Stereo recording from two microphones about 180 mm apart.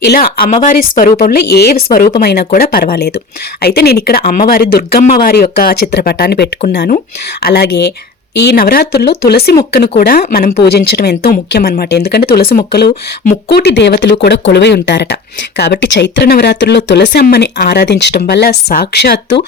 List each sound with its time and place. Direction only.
0.0 s speech: 60° left (ahead or behind)
0.5 s speech: 45° left (ahead or behind); by 19.4 s 65° left (ahead or behind)